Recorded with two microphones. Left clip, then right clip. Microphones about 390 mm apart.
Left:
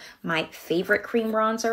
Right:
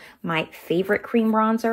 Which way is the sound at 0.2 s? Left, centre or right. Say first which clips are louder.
Right 1 dB; centre.